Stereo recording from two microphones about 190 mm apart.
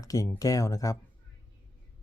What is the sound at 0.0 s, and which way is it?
Speech, 15° left (ahead or behind).